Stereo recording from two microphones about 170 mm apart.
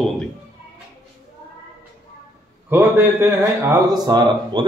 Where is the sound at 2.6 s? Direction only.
10° right (ahead or behind).